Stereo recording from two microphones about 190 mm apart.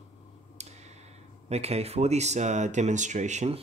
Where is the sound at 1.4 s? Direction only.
35° right (ahead or behind).